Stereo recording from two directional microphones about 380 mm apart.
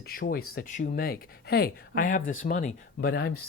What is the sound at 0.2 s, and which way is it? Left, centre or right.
Speech, left.